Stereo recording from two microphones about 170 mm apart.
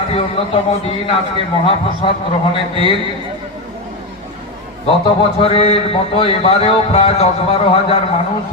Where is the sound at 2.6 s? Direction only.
30° left (ahead or behind).